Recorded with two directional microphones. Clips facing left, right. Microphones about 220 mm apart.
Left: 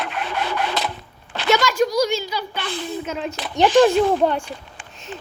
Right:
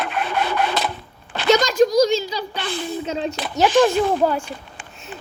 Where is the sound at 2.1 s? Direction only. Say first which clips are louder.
Right 3 dB; 35° right (ahead or behind).